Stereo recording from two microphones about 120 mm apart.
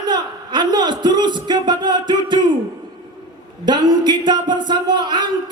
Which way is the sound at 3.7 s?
35° right (ahead or behind).